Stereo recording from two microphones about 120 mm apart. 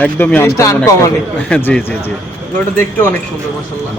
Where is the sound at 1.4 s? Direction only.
10° left (ahead or behind).